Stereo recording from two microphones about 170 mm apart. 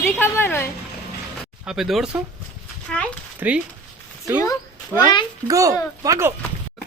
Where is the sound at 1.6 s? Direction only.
Centre (ahead or behind).